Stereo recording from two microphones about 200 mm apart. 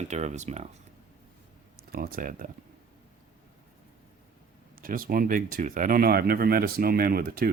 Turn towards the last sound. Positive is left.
turn(degrees=-50)  # may be behind; listen again after turning